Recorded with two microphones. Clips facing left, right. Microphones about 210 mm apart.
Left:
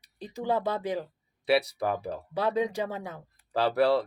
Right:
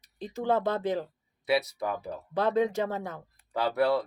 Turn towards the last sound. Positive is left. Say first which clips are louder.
# left 2 dB
turn(degrees=30)  # may be behind; listen again after turning